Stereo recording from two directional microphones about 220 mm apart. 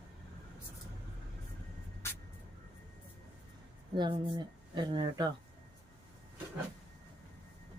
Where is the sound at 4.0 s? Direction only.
20° right (ahead or behind).